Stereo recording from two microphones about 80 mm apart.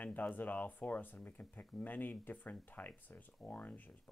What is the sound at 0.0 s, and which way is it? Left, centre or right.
Speech, centre.